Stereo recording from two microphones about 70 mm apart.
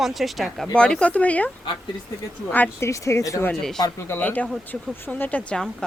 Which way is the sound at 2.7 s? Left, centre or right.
Left.